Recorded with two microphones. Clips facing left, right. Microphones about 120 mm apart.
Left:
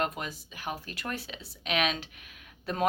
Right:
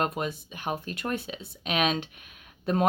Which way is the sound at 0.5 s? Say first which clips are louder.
Right 5 dB; 30° right (ahead or behind).